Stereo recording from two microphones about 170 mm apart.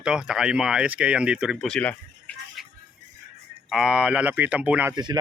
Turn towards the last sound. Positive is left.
turn(degrees=-10)  # may be behind; listen again after turning